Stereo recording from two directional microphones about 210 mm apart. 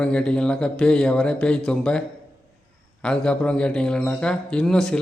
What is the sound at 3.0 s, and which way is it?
Mantra, 5° left (ahead or behind).